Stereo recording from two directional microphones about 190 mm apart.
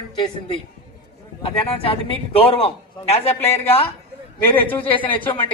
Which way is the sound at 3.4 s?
10° left (ahead or behind).